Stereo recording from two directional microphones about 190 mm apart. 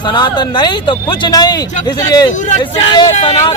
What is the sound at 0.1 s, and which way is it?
Speech, 25° left (ahead or behind).